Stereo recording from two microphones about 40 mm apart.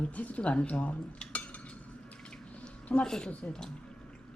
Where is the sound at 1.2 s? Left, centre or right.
Left.